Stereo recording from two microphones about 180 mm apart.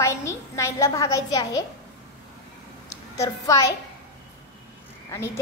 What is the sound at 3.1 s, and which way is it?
Speech, 20° left (ahead or behind).